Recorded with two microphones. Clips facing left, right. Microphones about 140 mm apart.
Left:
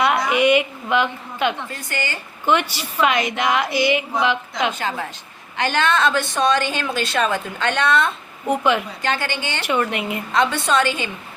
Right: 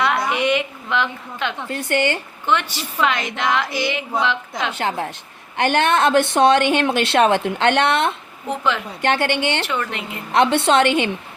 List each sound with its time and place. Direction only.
0.3 s a woman's voice: 10° left (ahead or behind)
1.7 s a woman's voice: 65° right (ahead or behind)
2.5 s a woman's voice: 10° left (ahead or behind)
4.7 s a woman's voice: 65° right (ahead or behind)
8.4 s a woman's voice: 15° left (ahead or behind)
9.0 s a woman's voice: 65° right (ahead or behind)
9.6 s a woman's voice: 15° left (ahead or behind)
10.3 s a woman's voice: 65° right (ahead or behind)